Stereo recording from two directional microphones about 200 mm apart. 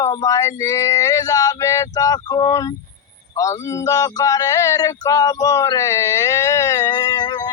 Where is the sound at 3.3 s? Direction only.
15° left (ahead or behind).